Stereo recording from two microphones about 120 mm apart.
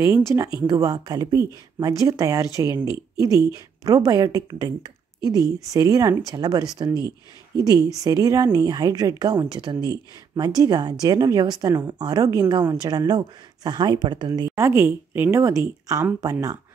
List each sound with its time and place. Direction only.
0.1 s speech: 25° right (ahead or behind)
14.5 s speech: 20° right (ahead or behind)